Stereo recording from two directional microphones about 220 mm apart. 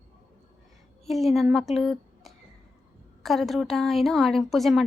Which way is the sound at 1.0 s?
Centre (ahead or behind).